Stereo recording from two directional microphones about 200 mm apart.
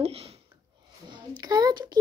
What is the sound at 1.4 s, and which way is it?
Speech, 20° right (ahead or behind).